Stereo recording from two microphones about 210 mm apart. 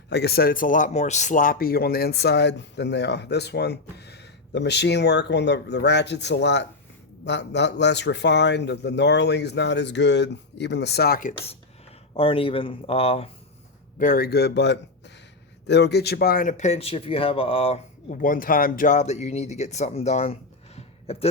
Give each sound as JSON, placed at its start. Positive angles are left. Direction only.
{"t": 0.1, "sound": "a man's voice", "side_deg": 50}
{"t": 12.1, "sound": "speech", "side_deg": 25}
{"t": 14.0, "sound": "speech", "side_deg": 45}
{"t": 20.7, "sound": "a sound", "side_deg": 30}